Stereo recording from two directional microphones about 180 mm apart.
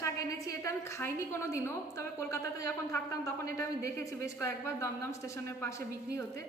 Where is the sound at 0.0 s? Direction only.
15° left (ahead or behind).